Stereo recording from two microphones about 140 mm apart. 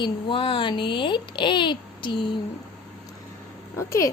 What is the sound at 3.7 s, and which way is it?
Speech, 20° left (ahead or behind).